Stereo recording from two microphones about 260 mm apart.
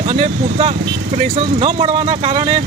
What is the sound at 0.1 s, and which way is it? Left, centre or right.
Speech, right.